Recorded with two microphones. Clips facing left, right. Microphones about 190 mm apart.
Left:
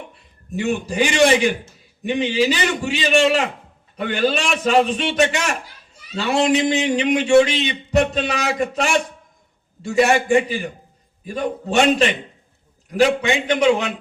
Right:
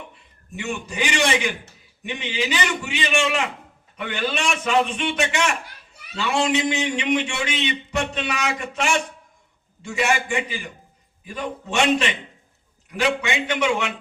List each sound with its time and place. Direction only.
0.5 s a man's voice: 35° left (ahead or behind)